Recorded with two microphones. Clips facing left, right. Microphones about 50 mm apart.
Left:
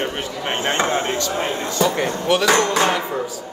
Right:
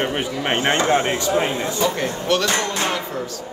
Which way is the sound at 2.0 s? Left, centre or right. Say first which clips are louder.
Left 2 dB; centre.